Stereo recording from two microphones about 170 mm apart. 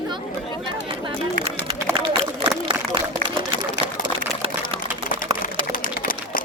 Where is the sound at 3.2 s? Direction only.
55° right (ahead or behind).